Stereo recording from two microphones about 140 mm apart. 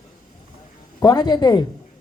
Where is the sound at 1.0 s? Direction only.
30° left (ahead or behind).